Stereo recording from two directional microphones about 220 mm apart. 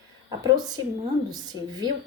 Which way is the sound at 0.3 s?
20° right (ahead or behind).